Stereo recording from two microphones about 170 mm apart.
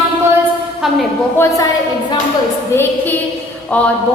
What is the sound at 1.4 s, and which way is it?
Speech, 20° left (ahead or behind).